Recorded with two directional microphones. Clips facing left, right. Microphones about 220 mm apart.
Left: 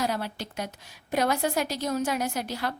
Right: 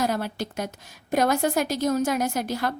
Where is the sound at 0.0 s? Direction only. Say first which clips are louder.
Right 4 dB; 45° right (ahead or behind).